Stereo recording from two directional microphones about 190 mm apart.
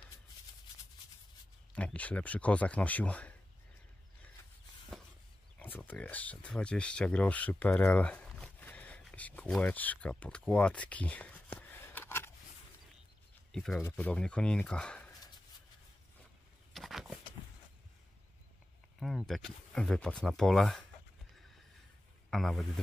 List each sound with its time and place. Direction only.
1.7 s speech: 5° left (ahead or behind)
5.6 s speech: 10° left (ahead or behind)
13.5 s speech: 5° left (ahead or behind)
16.7 s a sound: centre (ahead or behind)
18.9 s speech: centre (ahead or behind)
22.3 s speech: centre (ahead or behind)